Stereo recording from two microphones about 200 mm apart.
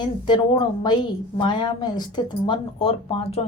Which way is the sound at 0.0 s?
20° left (ahead or behind).